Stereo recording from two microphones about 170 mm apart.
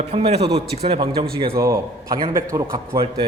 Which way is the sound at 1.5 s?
20° right (ahead or behind).